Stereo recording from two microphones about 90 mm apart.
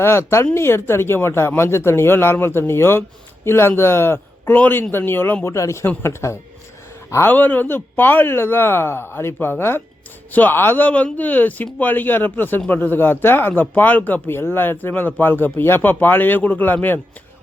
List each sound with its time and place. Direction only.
0.0 s speech: 30° left (ahead or behind)
5.5 s speech: 35° left (ahead or behind)